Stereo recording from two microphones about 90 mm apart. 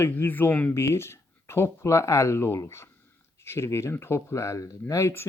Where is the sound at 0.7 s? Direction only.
30° left (ahead or behind).